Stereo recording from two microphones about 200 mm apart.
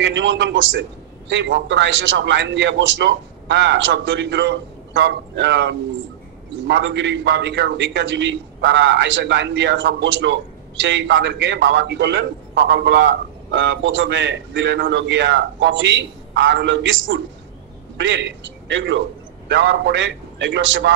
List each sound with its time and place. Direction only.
0.0 s a man's voice: 65° right (ahead or behind)